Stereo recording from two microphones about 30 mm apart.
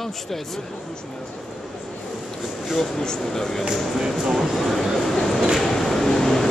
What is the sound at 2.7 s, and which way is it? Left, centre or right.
Speech, centre.